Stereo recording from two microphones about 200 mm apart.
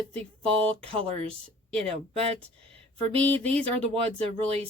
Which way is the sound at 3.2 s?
5° left (ahead or behind).